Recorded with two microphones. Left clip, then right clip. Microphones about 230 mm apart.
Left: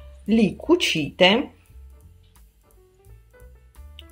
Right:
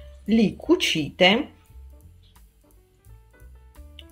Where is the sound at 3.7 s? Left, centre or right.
Centre.